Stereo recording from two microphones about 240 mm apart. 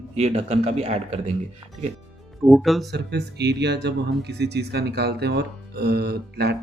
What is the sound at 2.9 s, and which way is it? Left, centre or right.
Speech, right.